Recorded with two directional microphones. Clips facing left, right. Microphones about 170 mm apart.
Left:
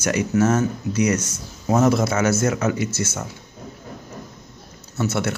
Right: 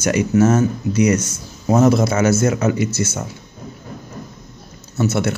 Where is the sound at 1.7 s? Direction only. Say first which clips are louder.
Right 4 dB; 30° right (ahead or behind).